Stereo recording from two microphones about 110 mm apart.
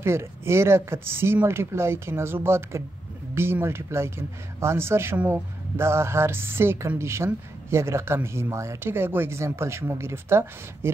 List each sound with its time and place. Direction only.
0.0 s speech: 25° right (ahead or behind)